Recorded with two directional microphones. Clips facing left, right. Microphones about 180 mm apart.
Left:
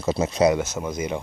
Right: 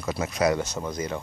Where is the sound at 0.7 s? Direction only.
5° left (ahead or behind).